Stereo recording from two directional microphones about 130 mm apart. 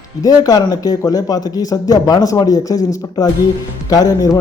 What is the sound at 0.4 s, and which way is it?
Speech, 30° left (ahead or behind).